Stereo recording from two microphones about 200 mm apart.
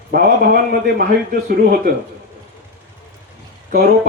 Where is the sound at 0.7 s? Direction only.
50° right (ahead or behind).